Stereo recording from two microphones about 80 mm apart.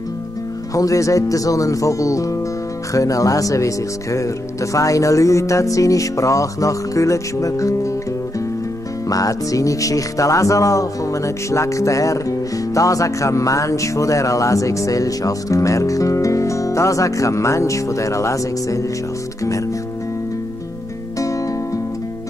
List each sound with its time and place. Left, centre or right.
0.7 s speech: left
9.1 s speech: left